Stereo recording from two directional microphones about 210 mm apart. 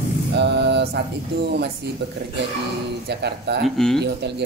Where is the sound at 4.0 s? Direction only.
55° right (ahead or behind).